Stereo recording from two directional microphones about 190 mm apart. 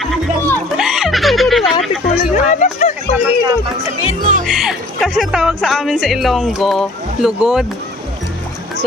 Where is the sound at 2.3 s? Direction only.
40° left (ahead or behind).